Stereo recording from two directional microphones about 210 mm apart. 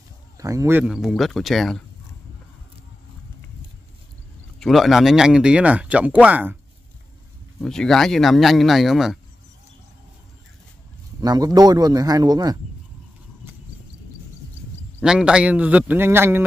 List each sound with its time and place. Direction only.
0.4 s speech: 15° right (ahead or behind); by 1.8 s centre (ahead or behind)
4.6 s speech: centre (ahead or behind)
7.6 s speech: 5° left (ahead or behind)
11.1 s a man's voice: 20° right (ahead or behind)
15.0 s a man's voice: 5° right (ahead or behind)